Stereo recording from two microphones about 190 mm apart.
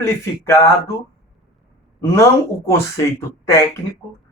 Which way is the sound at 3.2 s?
15° left (ahead or behind).